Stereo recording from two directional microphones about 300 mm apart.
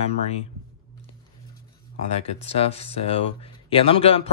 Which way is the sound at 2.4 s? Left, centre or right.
Left.